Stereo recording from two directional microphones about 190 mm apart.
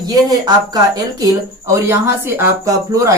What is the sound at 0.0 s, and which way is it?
Speech, 20° right (ahead or behind).